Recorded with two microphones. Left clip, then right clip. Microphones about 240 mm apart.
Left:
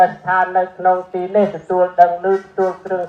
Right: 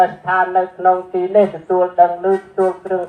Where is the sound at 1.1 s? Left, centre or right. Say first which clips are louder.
Right 2 dB; right.